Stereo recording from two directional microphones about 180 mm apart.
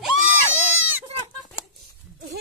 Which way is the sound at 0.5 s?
90° right.